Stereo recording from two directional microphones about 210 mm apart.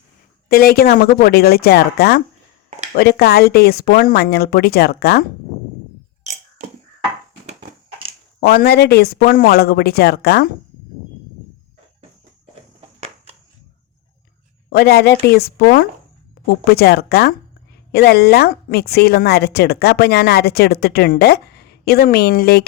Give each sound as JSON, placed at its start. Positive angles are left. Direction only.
{"t": 0.4, "sound": "speech", "side_deg": 45}
{"t": 8.4, "sound": "speech", "side_deg": 50}
{"t": 12.8, "sound": "walk", "side_deg": -30}
{"t": 14.7, "sound": "speech", "side_deg": 50}